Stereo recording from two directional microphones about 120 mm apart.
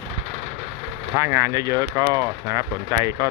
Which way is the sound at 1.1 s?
30° right (ahead or behind).